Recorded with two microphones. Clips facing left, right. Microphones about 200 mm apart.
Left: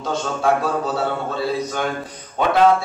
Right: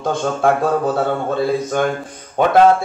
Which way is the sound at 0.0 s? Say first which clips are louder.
Right 5 dB; 50° right (ahead or behind).